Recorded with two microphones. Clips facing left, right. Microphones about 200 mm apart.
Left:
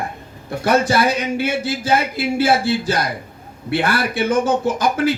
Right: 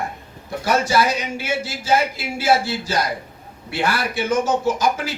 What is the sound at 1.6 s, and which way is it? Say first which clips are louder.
Speech: left 1 dB; 55° left (ahead or behind).